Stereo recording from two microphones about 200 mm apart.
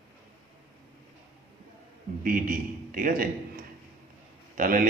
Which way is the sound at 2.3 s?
45° right (ahead or behind).